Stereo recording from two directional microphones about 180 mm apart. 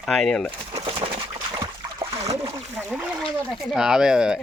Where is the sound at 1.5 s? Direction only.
15° right (ahead or behind).